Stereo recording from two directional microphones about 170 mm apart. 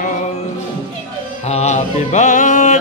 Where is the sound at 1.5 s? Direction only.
40° left (ahead or behind).